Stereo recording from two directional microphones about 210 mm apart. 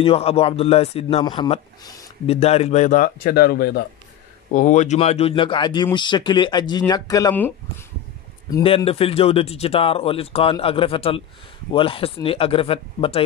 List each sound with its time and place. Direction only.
0.0 s speech: 25° left (ahead or behind); by 3.8 s 45° left (ahead or behind)
4.5 s speech: 35° left (ahead or behind)